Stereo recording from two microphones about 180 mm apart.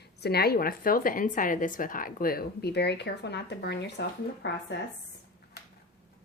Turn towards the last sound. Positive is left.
turn(degrees=70)  # may be behind; listen again after turning